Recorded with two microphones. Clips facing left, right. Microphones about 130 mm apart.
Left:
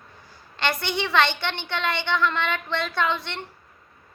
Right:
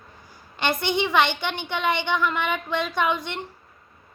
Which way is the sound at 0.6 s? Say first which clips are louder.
Right 3 dB; 20° right (ahead or behind).